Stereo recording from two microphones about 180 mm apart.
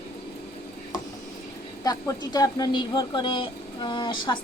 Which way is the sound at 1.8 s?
20° left (ahead or behind).